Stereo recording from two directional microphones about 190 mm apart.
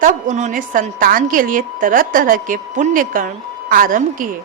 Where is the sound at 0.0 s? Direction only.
40° right (ahead or behind).